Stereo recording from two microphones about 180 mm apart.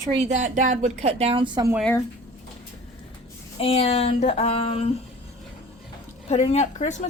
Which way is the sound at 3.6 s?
35° left (ahead or behind).